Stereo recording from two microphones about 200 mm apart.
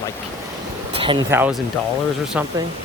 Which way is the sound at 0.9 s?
25° right (ahead or behind).